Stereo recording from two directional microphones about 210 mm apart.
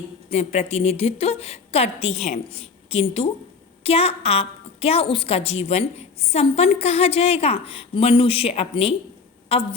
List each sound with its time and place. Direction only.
0.3 s a woman's voice: 30° left (ahead or behind)